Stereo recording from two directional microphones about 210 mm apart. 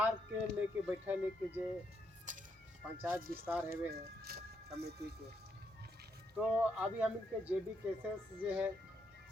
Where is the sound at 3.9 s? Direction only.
45° right (ahead or behind).